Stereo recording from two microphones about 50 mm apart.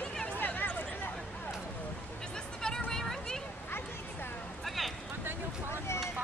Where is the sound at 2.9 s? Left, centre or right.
Centre.